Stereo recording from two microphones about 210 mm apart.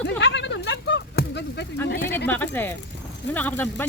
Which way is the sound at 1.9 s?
50° left (ahead or behind).